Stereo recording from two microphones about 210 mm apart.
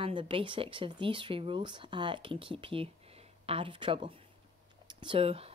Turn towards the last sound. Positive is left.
turn(degrees=-25)  # may be behind; listen again after turning